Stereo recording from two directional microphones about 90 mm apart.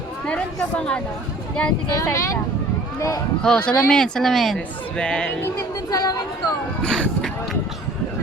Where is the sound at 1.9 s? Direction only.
35° left (ahead or behind).